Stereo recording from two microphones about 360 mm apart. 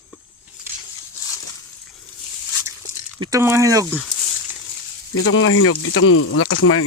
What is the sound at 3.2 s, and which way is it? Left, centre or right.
Speech, centre.